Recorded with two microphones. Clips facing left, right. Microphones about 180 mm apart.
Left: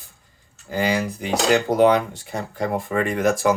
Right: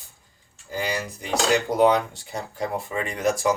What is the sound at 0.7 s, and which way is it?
Speech, 75° left (ahead or behind).